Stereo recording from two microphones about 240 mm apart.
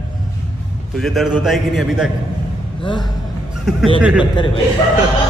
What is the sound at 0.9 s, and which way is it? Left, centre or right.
A man's voice, centre.